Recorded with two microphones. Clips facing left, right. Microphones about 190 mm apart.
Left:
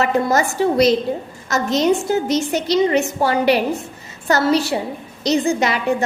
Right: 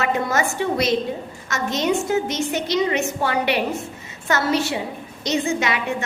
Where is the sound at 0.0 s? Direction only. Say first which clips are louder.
Left 4 dB; 40° left (ahead or behind).